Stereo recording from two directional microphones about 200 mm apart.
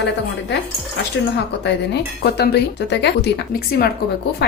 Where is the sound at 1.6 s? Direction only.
55° left (ahead or behind).